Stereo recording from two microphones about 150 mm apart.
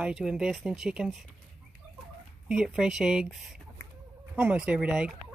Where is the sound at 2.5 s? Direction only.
5° right (ahead or behind).